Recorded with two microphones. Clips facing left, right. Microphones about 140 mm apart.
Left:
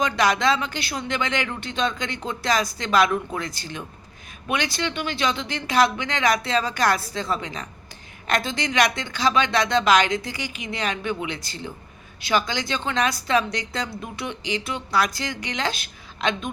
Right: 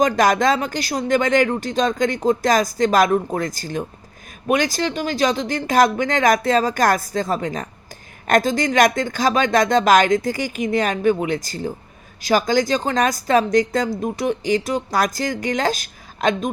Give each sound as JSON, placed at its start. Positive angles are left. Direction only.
{"t": 0.0, "sound": "speech", "side_deg": -45}